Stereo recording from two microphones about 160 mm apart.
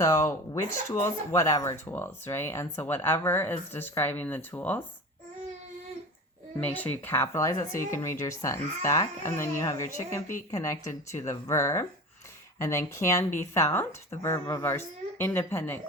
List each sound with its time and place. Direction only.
0.0 s speech: 20° left (ahead or behind)
6.6 s speech: 10° left (ahead or behind)